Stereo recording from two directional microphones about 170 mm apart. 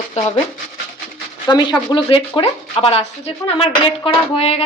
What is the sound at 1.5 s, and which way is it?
Speech, 25° left (ahead or behind).